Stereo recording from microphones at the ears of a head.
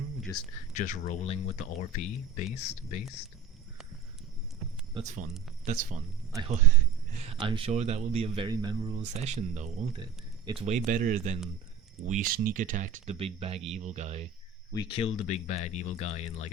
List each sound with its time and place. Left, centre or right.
0.3 s speech: left
4.6 s speech: right
14.8 s speech: left